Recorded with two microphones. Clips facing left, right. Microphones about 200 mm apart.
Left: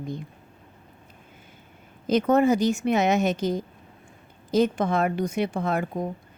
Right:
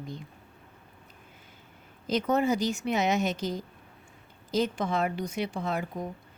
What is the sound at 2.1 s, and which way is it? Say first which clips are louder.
A woman's voice: left 6 dB; 55° left (ahead or behind).